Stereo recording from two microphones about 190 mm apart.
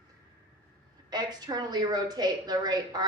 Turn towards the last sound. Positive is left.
turn(degrees=-20)  # may be behind; listen again after turning